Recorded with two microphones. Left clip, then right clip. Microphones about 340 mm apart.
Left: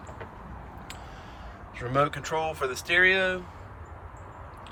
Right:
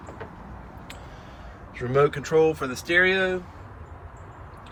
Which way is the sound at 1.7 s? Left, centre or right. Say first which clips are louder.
Right 4 dB; centre.